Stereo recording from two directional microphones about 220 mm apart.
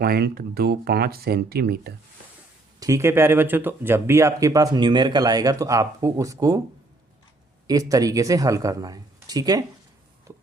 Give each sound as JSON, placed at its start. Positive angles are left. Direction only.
{"t": 0.0, "sound": "speech", "side_deg": -45}
{"t": 2.8, "sound": "speech", "side_deg": -15}
{"t": 7.7, "sound": "speech", "side_deg": -15}
{"t": 10.3, "sound": "a sound", "side_deg": -15}